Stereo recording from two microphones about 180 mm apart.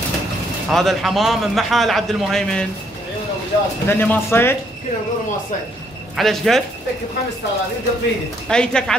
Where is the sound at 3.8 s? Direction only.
10° left (ahead or behind).